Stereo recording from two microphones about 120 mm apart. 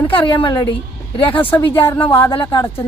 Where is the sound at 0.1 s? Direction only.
45° left (ahead or behind).